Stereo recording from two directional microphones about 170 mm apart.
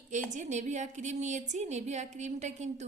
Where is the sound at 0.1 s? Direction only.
45° right (ahead or behind).